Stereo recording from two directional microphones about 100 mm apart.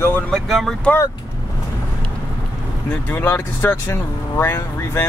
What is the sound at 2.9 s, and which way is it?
Speech, 20° left (ahead or behind).